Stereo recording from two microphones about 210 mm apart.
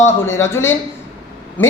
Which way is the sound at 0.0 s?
15° left (ahead or behind).